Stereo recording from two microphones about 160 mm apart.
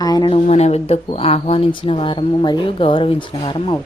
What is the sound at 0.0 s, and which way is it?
Speech, 25° left (ahead or behind).